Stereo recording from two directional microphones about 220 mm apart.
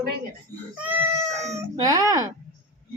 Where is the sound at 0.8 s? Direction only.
5° right (ahead or behind).